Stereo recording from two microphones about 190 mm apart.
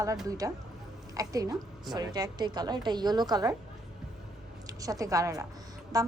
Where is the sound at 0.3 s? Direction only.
20° right (ahead or behind).